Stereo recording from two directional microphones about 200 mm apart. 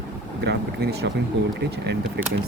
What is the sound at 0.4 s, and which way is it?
Speech, 55° right (ahead or behind).